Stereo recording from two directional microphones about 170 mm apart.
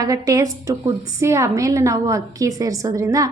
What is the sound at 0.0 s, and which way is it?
A woman's voice, 20° right (ahead or behind).